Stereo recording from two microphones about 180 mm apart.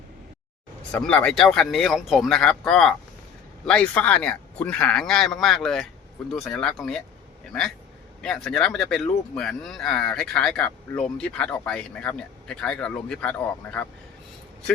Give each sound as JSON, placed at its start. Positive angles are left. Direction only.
{"t": 0.9, "sound": "speech", "side_deg": 5}
{"t": 8.2, "sound": "speech", "side_deg": 5}